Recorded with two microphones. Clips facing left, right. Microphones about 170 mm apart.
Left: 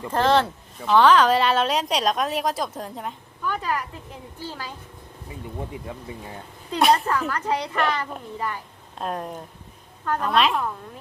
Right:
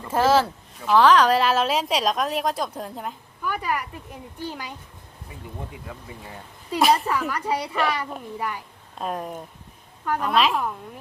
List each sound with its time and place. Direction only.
0.1 s speech: 5° right (ahead or behind)
6.7 s speech: centre (ahead or behind)